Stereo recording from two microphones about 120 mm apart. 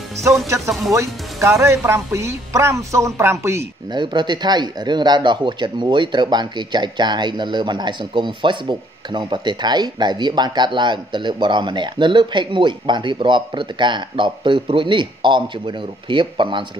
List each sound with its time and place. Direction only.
0.7 s speech: centre (ahead or behind)
0.9 s speech: 25° right (ahead or behind)
3.9 s speech: 40° right (ahead or behind)